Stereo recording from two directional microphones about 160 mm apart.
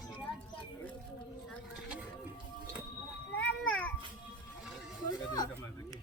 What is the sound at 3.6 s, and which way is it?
Children playing, 5° left (ahead or behind).